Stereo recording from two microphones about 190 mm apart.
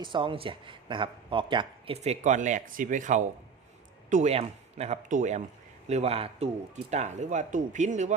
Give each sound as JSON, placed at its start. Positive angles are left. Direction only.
{"t": 0.0, "sound": "speech", "side_deg": -25}